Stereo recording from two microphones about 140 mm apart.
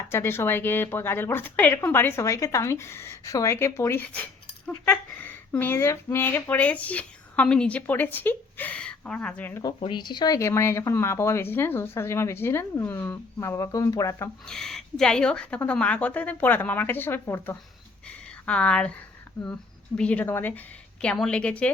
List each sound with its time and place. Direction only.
0.1 s speech: 15° left (ahead or behind)
9.8 s speech: 35° left (ahead or behind)
14.4 s a woman's voice: 5° left (ahead or behind)
20.0 s speech: 10° left (ahead or behind)